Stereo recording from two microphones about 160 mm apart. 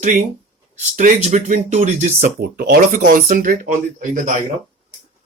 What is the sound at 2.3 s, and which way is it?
Speech, 70° right (ahead or behind).